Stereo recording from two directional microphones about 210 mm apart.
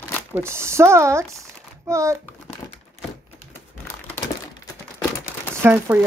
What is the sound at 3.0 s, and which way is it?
Typewriter, 30° left (ahead or behind).